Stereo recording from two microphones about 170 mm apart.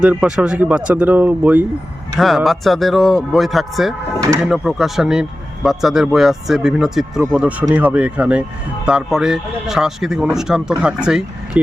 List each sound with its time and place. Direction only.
0.0 s speech: 5° right (ahead or behind)